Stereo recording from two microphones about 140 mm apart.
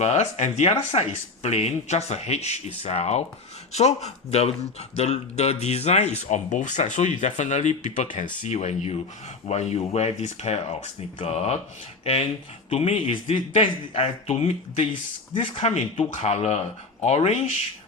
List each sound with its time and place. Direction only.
0.0 s speech: 50° left (ahead or behind)
8.4 s speech: 55° left (ahead or behind)